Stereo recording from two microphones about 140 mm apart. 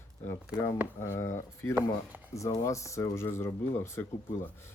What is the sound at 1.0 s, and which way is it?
Speech, 20° left (ahead or behind).